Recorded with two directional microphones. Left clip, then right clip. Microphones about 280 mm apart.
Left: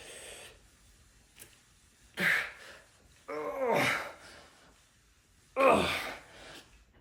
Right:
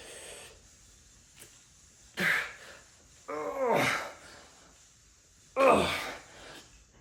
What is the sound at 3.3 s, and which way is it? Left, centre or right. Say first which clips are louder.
Wail: right 2 dB; centre.